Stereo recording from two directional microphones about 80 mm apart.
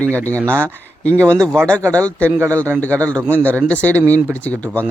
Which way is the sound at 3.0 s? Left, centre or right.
Centre.